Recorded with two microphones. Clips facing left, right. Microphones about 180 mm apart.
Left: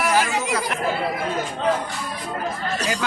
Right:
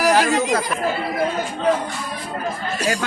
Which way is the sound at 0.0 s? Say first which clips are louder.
Right 4 dB; 40° right (ahead or behind).